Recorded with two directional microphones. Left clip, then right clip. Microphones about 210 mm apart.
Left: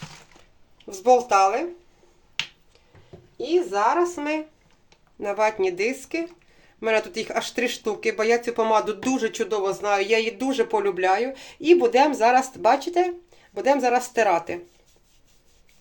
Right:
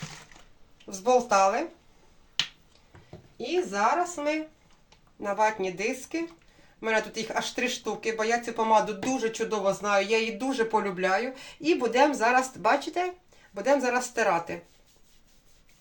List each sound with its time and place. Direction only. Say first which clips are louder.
0.9 s speech: left 5 dB; 40° left (ahead or behind)
3.7 s speech: left 2 dB; 40° left (ahead or behind)